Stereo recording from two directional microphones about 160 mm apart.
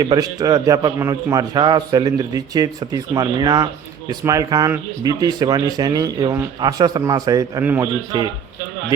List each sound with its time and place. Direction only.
0.0 s a man's voice: 25° right (ahead or behind)
7.6 s a man's voice: 10° right (ahead or behind)